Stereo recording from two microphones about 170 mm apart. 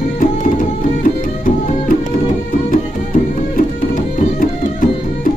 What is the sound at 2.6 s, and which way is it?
Music, 50° left (ahead or behind).